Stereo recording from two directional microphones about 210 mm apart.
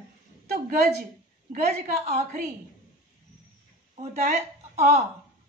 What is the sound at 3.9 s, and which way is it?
Speech, 30° right (ahead or behind).